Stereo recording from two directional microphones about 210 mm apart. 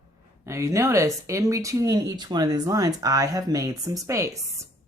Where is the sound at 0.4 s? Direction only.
15° right (ahead or behind).